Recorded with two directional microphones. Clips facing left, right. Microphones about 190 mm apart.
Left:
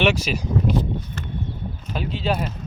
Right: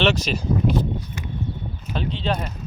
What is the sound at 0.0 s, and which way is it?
Speech, 10° left (ahead or behind).